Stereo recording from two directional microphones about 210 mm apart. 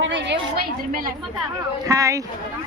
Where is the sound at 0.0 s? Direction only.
60° right (ahead or behind).